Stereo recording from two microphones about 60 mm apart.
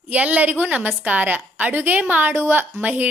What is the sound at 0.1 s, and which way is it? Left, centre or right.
A woman's voice, right.